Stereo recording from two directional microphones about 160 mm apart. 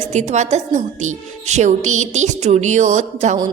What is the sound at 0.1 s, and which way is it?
A woman's voice, 45° right (ahead or behind).